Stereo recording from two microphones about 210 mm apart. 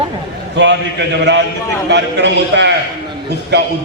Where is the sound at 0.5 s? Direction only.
60° right (ahead or behind).